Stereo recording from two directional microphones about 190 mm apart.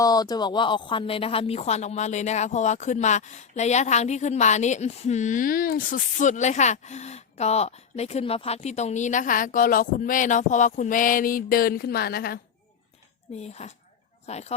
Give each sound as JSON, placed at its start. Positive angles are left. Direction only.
{"t": 0.0, "sound": "a woman's voice", "side_deg": 20}
{"t": 13.4, "sound": "a woman's voice", "side_deg": 35}